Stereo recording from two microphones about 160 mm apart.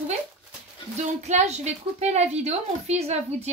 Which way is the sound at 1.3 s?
45° right (ahead or behind).